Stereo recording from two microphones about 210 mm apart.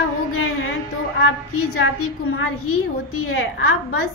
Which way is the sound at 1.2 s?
90° left.